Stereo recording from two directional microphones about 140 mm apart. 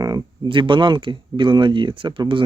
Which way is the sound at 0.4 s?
35° right (ahead or behind).